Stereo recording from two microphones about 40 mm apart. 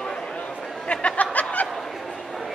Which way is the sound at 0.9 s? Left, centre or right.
Left.